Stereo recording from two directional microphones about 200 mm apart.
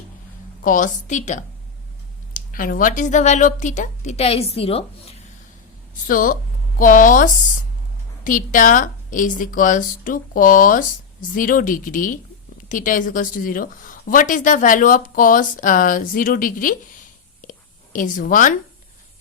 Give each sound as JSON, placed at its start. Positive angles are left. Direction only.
{"t": 0.6, "sound": "a woman's voice", "side_deg": 40}
{"t": 6.1, "sound": "a woman's voice", "side_deg": 45}
{"t": 17.4, "sound": "whispering", "side_deg": 40}
{"t": 17.9, "sound": "a woman's voice", "side_deg": 40}